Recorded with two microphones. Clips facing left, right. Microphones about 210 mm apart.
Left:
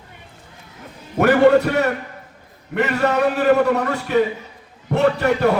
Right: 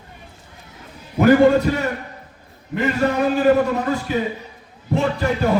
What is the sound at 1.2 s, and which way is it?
A man's voice, 65° left (ahead or behind).